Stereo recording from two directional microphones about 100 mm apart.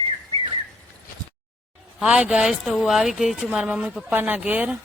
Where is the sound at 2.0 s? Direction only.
10° right (ahead or behind).